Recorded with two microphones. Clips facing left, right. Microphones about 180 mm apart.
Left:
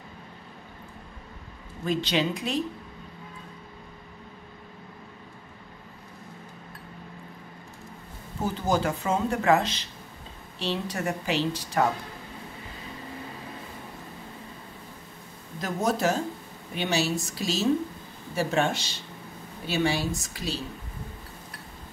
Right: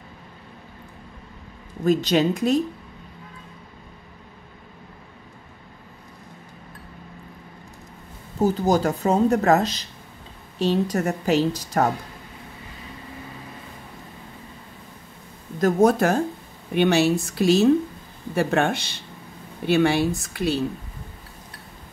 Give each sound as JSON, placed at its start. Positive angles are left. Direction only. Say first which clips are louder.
{"t": 1.9, "sound": "a woman's voice", "louder": "right 7 dB", "side_deg": -45}
{"t": 8.4, "sound": "a woman's voice", "louder": "right 6 dB", "side_deg": -40}
{"t": 15.6, "sound": "a woman's voice", "louder": "right 8 dB", "side_deg": -55}